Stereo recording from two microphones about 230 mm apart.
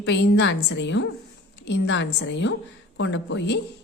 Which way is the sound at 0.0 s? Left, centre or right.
Left.